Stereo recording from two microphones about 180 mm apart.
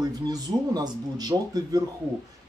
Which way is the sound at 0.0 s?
20° right (ahead or behind).